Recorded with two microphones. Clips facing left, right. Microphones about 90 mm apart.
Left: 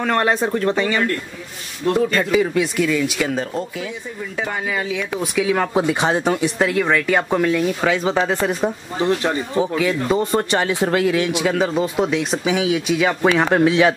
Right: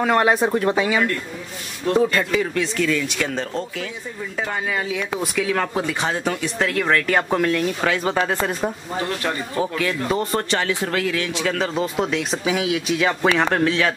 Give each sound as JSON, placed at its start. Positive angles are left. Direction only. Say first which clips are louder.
{"t": 0.0, "sound": "speech", "louder": "right 1 dB", "side_deg": -5}
{"t": 2.0, "sound": "speech", "louder": "left 3 dB", "side_deg": 0}
{"t": 2.5, "sound": "speech", "louder": "left 3 dB", "side_deg": 10}
{"t": 5.8, "sound": "speech", "louder": "left 5 dB", "side_deg": 20}
{"t": 6.6, "sound": "speech", "louder": "even", "side_deg": 5}
{"t": 9.0, "sound": "speech", "louder": "left 7 dB", "side_deg": 20}
{"t": 9.8, "sound": "speech", "louder": "left 4 dB", "side_deg": 10}
{"t": 10.5, "sound": "speech", "louder": "left 4 dB", "side_deg": 20}